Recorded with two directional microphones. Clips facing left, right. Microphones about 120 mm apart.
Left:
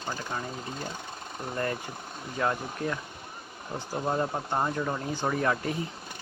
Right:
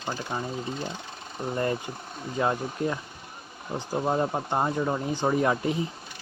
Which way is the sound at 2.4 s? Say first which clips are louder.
Right 3 dB; 20° right (ahead or behind).